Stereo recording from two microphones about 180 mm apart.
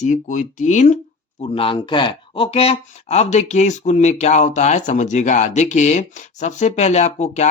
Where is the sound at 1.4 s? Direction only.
30° left (ahead or behind).